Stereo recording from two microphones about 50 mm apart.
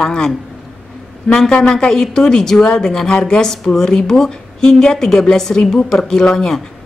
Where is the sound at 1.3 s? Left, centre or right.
Centre.